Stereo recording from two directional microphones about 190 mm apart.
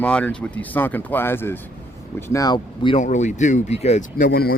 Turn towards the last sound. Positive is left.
turn(degrees=55)  # may be behind; listen again after turning